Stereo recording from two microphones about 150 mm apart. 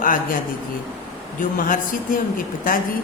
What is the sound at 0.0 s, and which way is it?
Speech, 65° left (ahead or behind).